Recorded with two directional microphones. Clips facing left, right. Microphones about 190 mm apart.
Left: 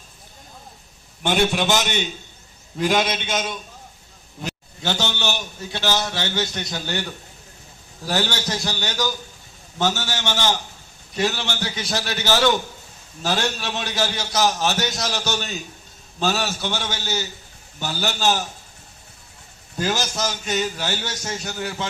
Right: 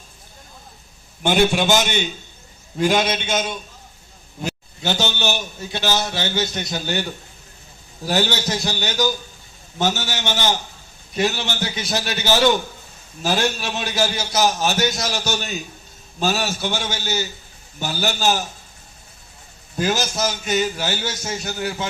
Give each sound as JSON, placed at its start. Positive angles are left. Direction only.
{"t": 1.2, "sound": "a man's voice", "side_deg": 0}
{"t": 4.8, "sound": "a man's voice", "side_deg": -15}
{"t": 8.0, "sound": "a man's voice", "side_deg": -20}
{"t": 19.8, "sound": "a man's voice", "side_deg": -10}